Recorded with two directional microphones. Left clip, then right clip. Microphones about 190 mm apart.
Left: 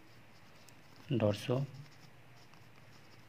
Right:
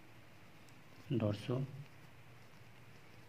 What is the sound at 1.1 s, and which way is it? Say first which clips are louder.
Speech: left 6 dB; 45° left (ahead or behind).